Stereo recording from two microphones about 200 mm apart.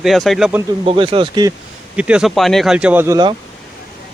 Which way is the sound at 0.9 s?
25° right (ahead or behind).